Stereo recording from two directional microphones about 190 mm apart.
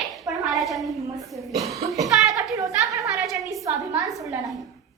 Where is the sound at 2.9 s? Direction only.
15° right (ahead or behind).